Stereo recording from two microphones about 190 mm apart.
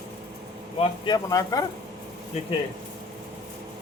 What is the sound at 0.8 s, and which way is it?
Speech, 20° left (ahead or behind).